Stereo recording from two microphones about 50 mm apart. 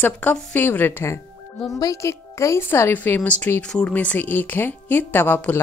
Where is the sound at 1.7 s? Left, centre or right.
Left.